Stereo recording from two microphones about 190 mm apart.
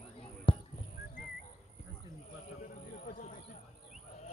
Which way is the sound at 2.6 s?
45° left (ahead or behind).